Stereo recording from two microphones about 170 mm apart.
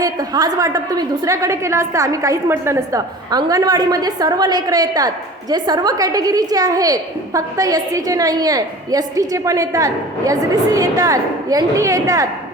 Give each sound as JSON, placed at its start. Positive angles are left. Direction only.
{"t": 0.0, "sound": "a woman's voice", "side_deg": -20}